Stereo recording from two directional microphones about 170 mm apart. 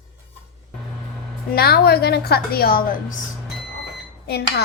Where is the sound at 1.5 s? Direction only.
65° left (ahead or behind).